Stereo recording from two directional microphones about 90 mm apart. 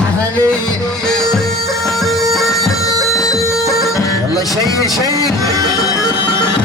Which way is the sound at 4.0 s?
40° left (ahead or behind).